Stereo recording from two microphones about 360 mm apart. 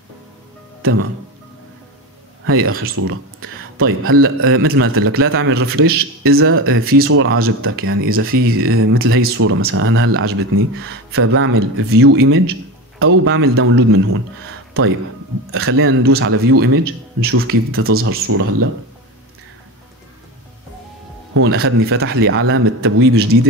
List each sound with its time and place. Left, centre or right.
2.4 s a man's voice: right
15.5 s a man's voice: right
21.4 s a man's voice: right